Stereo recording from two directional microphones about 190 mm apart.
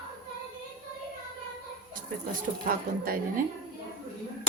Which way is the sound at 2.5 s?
50° right (ahead or behind).